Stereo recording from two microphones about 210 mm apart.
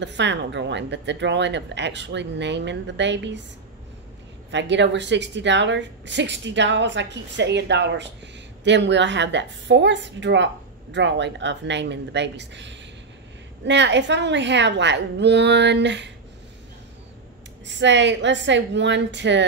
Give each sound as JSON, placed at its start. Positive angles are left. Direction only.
{"t": 0.0, "sound": "speech", "side_deg": -55}
{"t": 4.5, "sound": "speech", "side_deg": -55}
{"t": 17.6, "sound": "speech", "side_deg": -60}